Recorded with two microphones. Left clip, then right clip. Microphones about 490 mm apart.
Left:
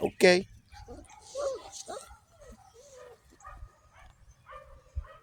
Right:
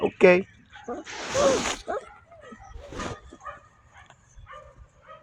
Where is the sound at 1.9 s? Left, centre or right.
Left.